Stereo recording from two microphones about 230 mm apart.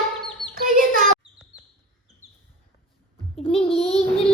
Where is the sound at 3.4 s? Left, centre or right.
Left.